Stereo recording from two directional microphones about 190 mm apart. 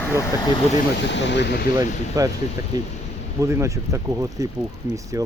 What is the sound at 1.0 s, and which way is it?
Speech, 70° left (ahead or behind).